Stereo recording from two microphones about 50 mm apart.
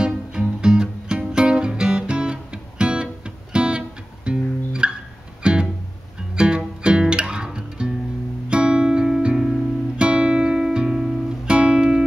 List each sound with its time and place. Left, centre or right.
0.0 s music: centre
11.5 s music: right